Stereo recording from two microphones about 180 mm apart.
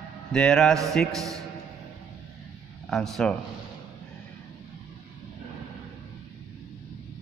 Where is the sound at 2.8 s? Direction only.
Centre (ahead or behind).